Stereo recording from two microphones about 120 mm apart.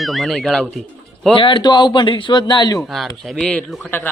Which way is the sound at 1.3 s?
45° left (ahead or behind).